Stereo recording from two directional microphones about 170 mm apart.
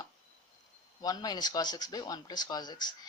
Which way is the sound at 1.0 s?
25° left (ahead or behind).